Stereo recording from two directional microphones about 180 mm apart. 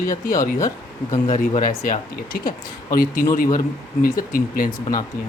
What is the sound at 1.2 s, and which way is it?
Speech, 45° left (ahead or behind).